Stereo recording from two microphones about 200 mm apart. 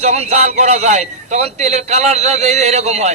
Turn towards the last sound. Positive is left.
turn(degrees=-35)  # may be behind; listen again after turning